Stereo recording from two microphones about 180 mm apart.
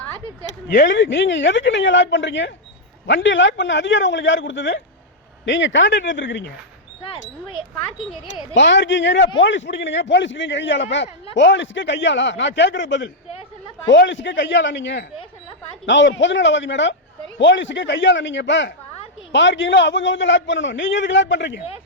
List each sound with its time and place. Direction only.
0.9 s a man's voice: 90° left
8.5 s a man's voice: 80° left